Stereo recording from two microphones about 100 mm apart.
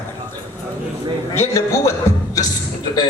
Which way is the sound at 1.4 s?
30° left (ahead or behind).